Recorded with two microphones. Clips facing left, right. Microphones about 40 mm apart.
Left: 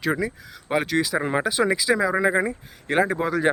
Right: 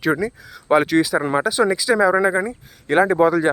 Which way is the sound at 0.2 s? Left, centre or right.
Centre.